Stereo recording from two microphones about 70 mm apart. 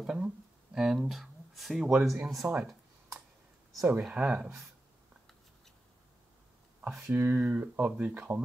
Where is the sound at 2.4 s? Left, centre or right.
Right.